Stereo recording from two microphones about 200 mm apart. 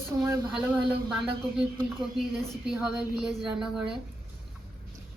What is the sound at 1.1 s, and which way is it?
A woman's voice, 5° right (ahead or behind).